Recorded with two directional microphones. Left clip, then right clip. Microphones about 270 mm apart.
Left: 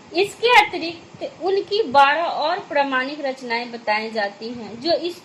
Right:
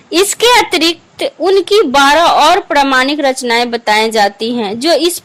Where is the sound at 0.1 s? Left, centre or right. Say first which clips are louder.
Right 7 dB; right.